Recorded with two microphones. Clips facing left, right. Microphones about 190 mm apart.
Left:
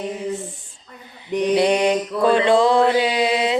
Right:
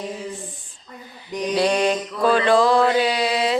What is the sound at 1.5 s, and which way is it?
Mantra, 20° left (ahead or behind).